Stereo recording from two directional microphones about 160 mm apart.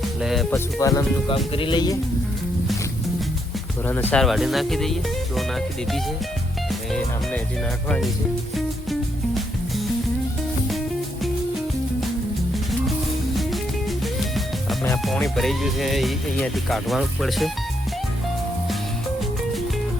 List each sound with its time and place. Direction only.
0.2 s music: centre (ahead or behind)
0.5 s speech: 20° left (ahead or behind)
1.5 s speech: 30° left (ahead or behind)
4.1 s speech: centre (ahead or behind)
8.5 s music: centre (ahead or behind)
13.3 s music: centre (ahead or behind)